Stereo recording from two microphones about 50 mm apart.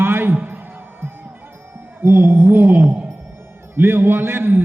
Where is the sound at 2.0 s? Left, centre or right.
Right.